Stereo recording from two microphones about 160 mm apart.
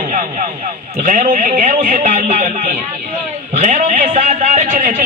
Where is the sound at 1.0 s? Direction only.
55° right (ahead or behind).